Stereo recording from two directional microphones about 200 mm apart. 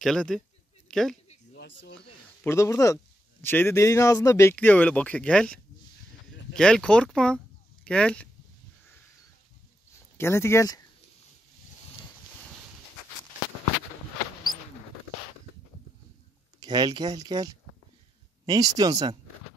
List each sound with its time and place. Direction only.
0.0 s a man's voice: 5° left (ahead or behind)
1.5 s a sound: 55° left (ahead or behind)
2.4 s speech: 15° left (ahead or behind)
10.1 s speech: 10° left (ahead or behind)
16.5 s speech: 20° right (ahead or behind)